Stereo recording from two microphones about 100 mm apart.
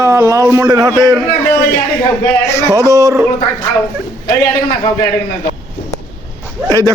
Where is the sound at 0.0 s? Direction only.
30° right (ahead or behind).